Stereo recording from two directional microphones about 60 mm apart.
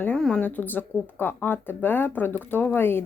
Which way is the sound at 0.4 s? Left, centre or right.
Left.